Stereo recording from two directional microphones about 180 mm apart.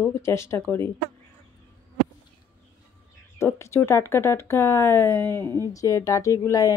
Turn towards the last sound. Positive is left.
turn(degrees=20)  # may be behind; listen again after turning